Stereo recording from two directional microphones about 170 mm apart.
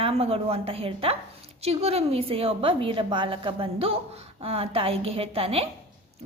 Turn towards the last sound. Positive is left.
turn(degrees=-35)  # may be behind; listen again after turning